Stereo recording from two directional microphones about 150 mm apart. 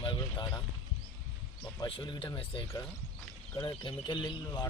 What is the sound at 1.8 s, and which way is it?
Speech, 30° left (ahead or behind).